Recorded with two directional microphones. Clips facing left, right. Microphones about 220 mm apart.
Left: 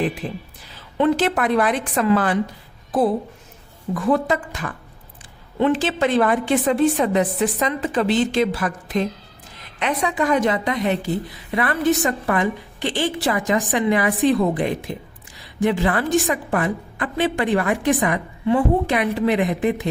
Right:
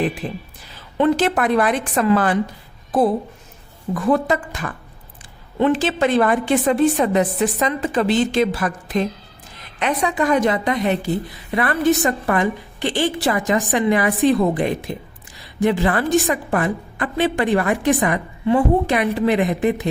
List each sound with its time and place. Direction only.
0.2 s a woman's voice: 40° right (ahead or behind)
3.9 s a woman's voice: 45° right (ahead or behind)